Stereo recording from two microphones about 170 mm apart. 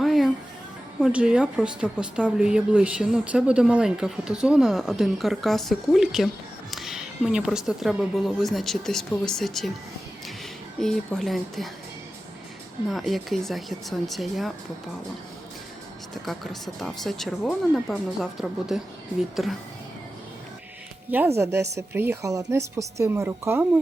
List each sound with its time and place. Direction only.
0.0 s music: centre (ahead or behind)
1.0 s a woman's voice: 5° right (ahead or behind)
10.8 s a woman's voice: centre (ahead or behind)
12.9 s a woman's voice: centre (ahead or behind)
16.2 s a woman's voice: centre (ahead or behind)
21.1 s a woman's voice: 15° right (ahead or behind)